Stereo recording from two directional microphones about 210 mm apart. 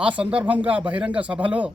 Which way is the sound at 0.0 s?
5° right (ahead or behind).